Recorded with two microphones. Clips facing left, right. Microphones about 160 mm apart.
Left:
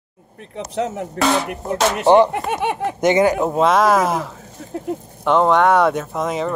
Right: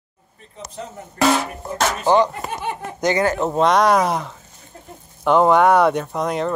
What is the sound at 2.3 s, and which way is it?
Speech, 70° left (ahead or behind).